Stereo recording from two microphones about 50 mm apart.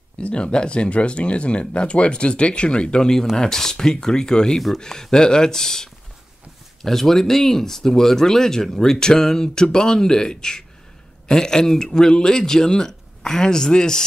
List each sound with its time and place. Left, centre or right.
0.2 s speech: left